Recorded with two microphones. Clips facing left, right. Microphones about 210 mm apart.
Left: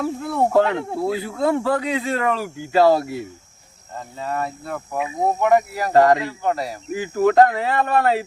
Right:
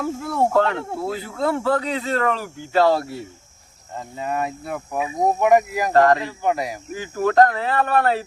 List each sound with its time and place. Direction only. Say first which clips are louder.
0.0 s speech: left 1 dB; centre (ahead or behind)
0.5 s speech: left 2 dB; 20° left (ahead or behind)
3.9 s speech: right 1 dB; 15° right (ahead or behind)
5.9 s speech: left 1 dB; 10° left (ahead or behind)
6.2 s speech: even; 15° right (ahead or behind)
7.3 s speech: left 1 dB; 15° left (ahead or behind)